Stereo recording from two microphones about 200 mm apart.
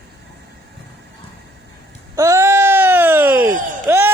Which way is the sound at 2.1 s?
15° right (ahead or behind).